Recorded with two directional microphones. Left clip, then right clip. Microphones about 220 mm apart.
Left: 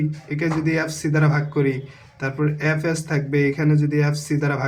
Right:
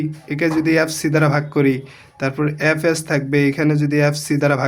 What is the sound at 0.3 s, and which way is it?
A man's voice, 40° right (ahead or behind).